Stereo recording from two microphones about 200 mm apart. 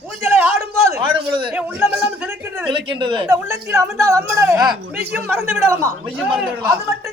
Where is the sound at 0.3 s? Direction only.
10° right (ahead or behind).